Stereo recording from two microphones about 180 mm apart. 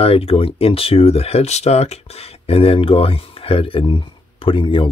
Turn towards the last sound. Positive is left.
turn(degrees=30)  # may be behind; listen again after turning